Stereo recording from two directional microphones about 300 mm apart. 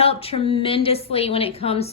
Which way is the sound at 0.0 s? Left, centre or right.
Centre.